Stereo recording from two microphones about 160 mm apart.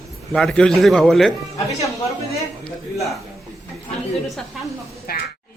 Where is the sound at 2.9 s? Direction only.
Centre (ahead or behind).